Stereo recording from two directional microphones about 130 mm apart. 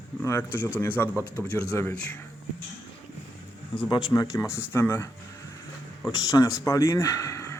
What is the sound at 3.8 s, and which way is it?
Speech, 35° left (ahead or behind).